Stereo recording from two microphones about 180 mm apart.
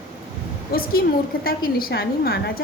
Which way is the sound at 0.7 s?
55° left (ahead or behind).